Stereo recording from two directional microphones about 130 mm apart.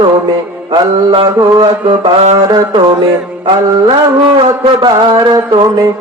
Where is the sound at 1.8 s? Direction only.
55° right (ahead or behind).